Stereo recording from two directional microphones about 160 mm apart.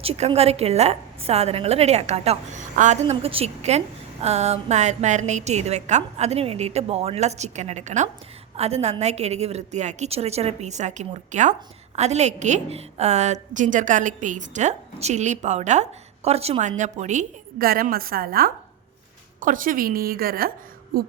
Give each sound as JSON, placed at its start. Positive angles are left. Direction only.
{"t": 0.0, "sound": "a woman's voice", "side_deg": -40}
{"t": 19.4, "sound": "a woman's voice", "side_deg": -55}